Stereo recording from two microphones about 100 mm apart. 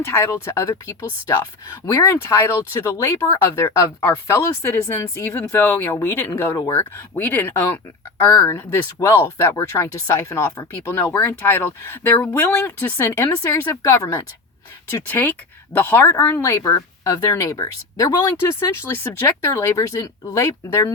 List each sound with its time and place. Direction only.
0.0 s speech: 25° left (ahead or behind)